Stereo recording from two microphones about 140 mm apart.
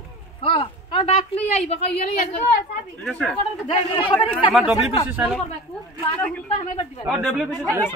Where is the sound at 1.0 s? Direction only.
50° left (ahead or behind).